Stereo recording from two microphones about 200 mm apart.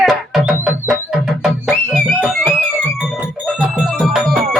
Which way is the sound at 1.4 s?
5° right (ahead or behind).